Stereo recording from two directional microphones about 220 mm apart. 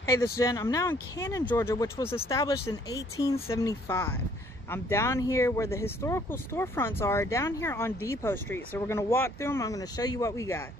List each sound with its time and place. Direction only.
0.0 s speech: 15° left (ahead or behind)